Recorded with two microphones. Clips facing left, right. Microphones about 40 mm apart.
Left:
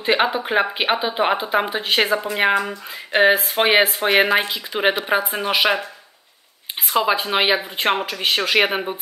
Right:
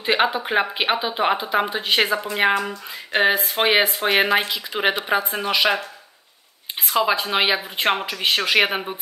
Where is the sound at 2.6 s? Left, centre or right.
Centre.